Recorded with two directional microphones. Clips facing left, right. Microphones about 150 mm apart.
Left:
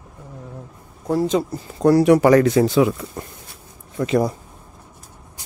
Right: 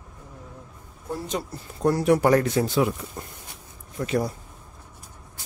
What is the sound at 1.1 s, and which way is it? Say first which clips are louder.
Speech: left 11 dB; 90° left.